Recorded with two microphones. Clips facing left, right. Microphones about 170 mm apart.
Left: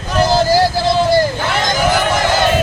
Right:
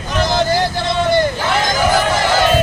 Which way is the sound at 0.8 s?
5° left (ahead or behind).